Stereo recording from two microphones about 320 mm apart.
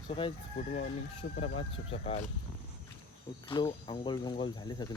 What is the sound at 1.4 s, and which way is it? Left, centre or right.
Speech, centre.